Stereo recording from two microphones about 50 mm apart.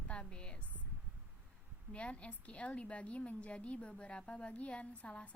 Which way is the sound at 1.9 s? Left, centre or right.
Left.